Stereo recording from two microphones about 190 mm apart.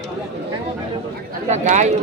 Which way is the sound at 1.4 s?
35° right (ahead or behind).